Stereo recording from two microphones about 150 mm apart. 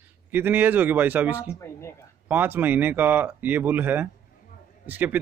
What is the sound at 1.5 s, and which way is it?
Speech, 20° left (ahead or behind).